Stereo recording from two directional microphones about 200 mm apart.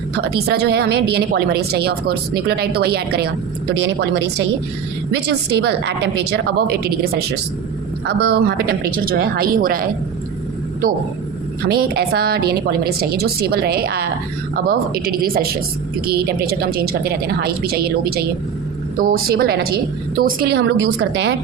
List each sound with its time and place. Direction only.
0.2 s speech: 55° right (ahead or behind)
3.8 s a woman's voice: 65° right (ahead or behind); by 9.8 s 45° right (ahead or behind)
11.7 s speech: 50° right (ahead or behind)